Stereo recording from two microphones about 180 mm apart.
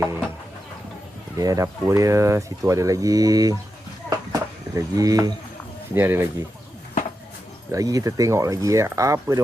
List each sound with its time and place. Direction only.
1.4 s speech: 20° right (ahead or behind)
4.3 s livestock: 20° right (ahead or behind)
5.9 s speech: 10° right (ahead or behind)
7.7 s speech: 20° right (ahead or behind)